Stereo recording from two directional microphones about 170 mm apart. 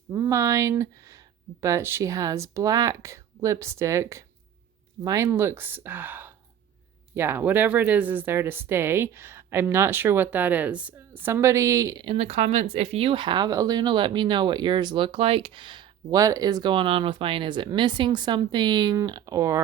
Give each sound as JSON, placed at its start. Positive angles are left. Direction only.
{"t": 0.1, "sound": "speech", "side_deg": -20}
{"t": 12.0, "sound": "speech", "side_deg": -40}